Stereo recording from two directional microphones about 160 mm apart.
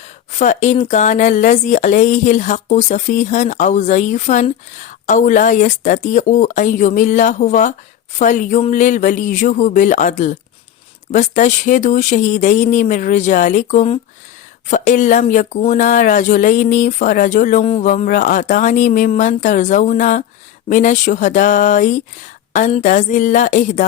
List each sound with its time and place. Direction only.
0.0 s speech: 45° left (ahead or behind)